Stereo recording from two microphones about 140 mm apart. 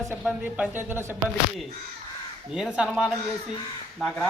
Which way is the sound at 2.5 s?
5° right (ahead or behind).